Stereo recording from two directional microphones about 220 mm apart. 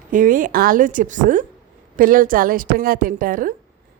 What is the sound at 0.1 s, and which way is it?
A woman's voice, 40° right (ahead or behind).